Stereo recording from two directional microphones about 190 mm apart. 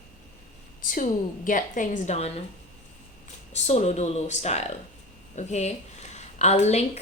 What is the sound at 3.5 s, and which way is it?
A woman's voice, 35° left (ahead or behind).